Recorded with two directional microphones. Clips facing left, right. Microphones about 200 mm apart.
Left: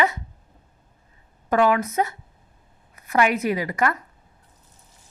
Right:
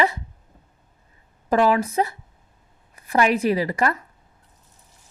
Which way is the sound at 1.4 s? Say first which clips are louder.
Right 1 dB; 30° right (ahead or behind).